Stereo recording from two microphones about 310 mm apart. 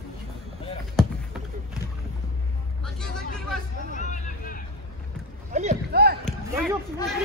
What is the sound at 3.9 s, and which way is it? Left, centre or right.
Vehicle, left.